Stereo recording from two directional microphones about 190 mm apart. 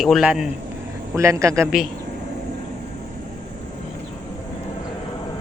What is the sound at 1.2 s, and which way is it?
Speech, 15° right (ahead or behind).